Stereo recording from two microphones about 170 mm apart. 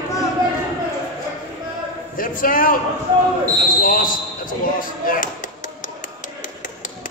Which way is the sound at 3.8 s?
55° left (ahead or behind).